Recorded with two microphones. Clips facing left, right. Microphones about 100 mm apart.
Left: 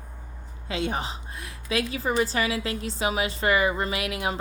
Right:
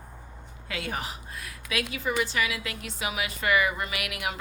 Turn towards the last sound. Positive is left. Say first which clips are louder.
# left 5 dB
turn(degrees=30)  # may be behind; listen again after turning